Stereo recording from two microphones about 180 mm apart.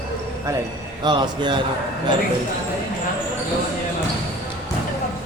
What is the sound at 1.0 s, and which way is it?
Speech, 25° right (ahead or behind).